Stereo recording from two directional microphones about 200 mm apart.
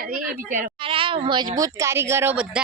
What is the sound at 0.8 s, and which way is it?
Speech, 25° right (ahead or behind).